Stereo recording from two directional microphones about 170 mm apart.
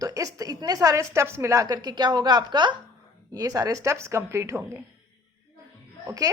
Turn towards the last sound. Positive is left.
turn(degrees=-20)  # may be behind; listen again after turning